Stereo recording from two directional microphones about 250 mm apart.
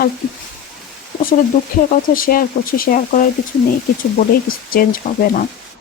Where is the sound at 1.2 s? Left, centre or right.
Left.